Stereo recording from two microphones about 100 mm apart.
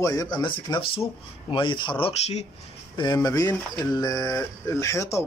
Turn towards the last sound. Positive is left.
turn(degrees=30)  # may be behind; listen again after turning